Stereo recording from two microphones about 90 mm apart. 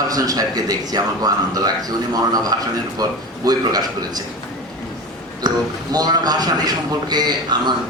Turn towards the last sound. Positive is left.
turn(degrees=-50)  # may be behind; listen again after turning